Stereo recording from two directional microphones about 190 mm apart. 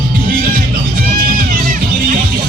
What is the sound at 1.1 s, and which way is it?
Music, 50° right (ahead or behind).